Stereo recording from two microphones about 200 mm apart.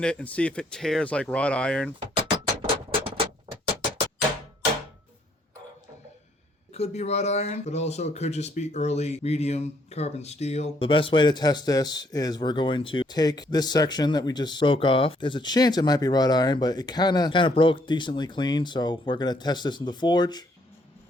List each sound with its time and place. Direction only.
0.0 s speech: 5° left (ahead or behind)
2.3 s music: 25° right (ahead or behind)
6.7 s speech: 30° left (ahead or behind)